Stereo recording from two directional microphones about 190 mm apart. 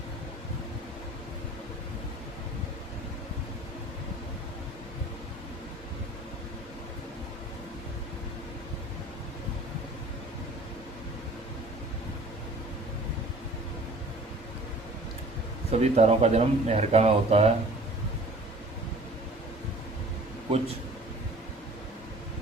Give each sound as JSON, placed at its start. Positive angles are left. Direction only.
{"t": 15.7, "sound": "speech", "side_deg": -35}